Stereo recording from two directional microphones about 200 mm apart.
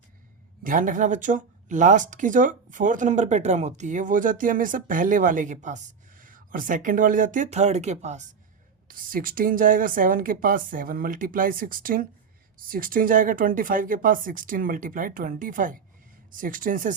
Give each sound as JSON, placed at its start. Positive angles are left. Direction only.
{"t": 0.6, "sound": "speech", "side_deg": -40}